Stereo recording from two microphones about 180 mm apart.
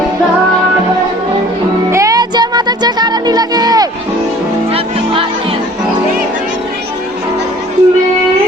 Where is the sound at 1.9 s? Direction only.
15° right (ahead or behind).